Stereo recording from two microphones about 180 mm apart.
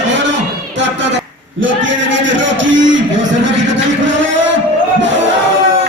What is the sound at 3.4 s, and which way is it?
Vehicle, 90° right.